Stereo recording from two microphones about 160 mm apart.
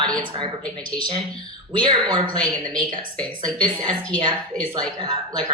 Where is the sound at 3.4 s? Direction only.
25° right (ahead or behind).